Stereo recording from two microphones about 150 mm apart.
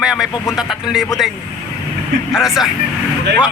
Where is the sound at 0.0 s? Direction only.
5° right (ahead or behind).